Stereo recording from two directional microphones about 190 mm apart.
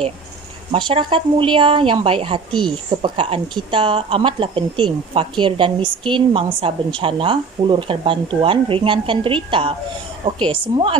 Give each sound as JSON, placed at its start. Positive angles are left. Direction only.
{"t": 0.7, "sound": "a woman's voice", "side_deg": -25}